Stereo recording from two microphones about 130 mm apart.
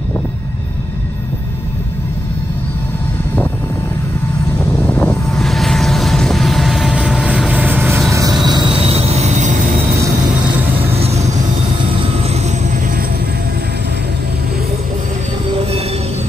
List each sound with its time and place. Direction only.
4.8 s vehicle: 10° left (ahead or behind); by 8.0 s 15° right (ahead or behind)
8.1 s vehicle: 25° right (ahead or behind)
8.8 s a sound: 50° right (ahead or behind); by 9.6 s 65° right (ahead or behind)
10.8 s vehicle: 50° right (ahead or behind)